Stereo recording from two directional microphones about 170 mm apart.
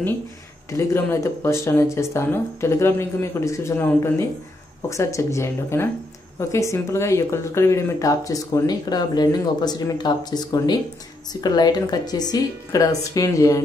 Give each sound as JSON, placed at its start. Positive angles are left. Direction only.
{"t": 0.7, "sound": "speech", "side_deg": 15}